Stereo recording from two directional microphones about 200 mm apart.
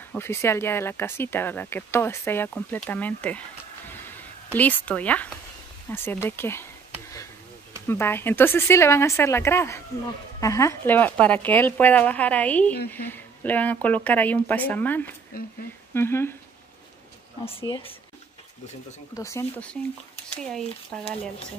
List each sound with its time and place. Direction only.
0.1 s speech: 10° left (ahead or behind)
7.8 s speech: 10° left (ahead or behind)
17.5 s speech: 25° left (ahead or behind)
19.1 s speech: 15° left (ahead or behind)